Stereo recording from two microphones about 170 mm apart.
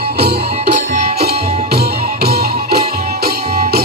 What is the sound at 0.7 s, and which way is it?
Music, 45° right (ahead or behind).